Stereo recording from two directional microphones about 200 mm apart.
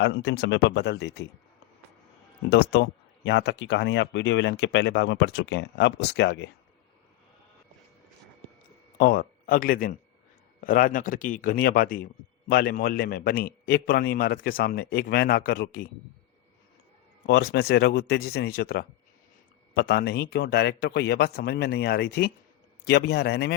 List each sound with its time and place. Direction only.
0.0 s speech: 60° left (ahead or behind)
2.5 s speech: 55° left (ahead or behind)
9.0 s a man's voice: 50° left (ahead or behind)
17.2 s a man's voice: 60° left (ahead or behind)